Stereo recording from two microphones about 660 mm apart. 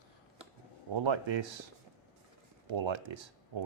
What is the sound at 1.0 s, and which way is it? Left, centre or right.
Speech, right.